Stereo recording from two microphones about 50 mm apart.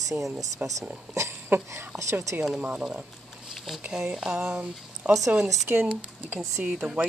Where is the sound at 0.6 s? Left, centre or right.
Right.